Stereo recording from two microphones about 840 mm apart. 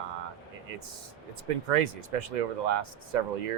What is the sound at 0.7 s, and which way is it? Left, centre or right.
Speech, right.